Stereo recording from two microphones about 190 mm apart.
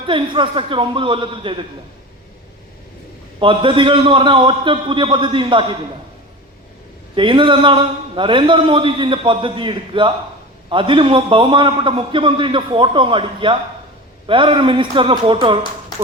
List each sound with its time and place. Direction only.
0.0 s a man's voice: 25° right (ahead or behind)
3.4 s a man's voice: 25° right (ahead or behind)
7.2 s a man's voice: 25° right (ahead or behind)